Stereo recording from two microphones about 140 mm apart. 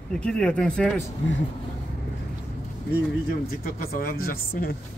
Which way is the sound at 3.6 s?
90° left.